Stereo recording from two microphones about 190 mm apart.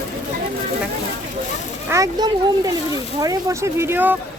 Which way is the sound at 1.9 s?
20° right (ahead or behind).